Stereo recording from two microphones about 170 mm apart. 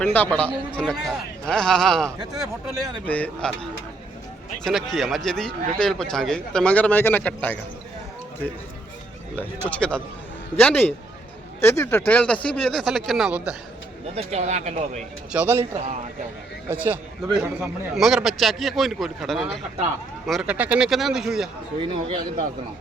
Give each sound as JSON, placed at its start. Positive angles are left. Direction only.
{"t": 0.0, "sound": "speech", "side_deg": 10}
{"t": 9.6, "sound": "speech", "side_deg": 5}
{"t": 14.2, "sound": "speech", "side_deg": -40}
{"t": 15.3, "sound": "a man's voice", "side_deg": -10}
{"t": 21.8, "sound": "speech", "side_deg": -30}